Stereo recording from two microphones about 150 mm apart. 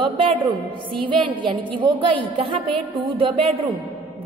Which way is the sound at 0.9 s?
35° right (ahead or behind).